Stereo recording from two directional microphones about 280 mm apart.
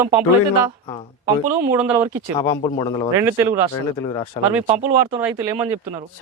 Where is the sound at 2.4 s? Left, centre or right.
Centre.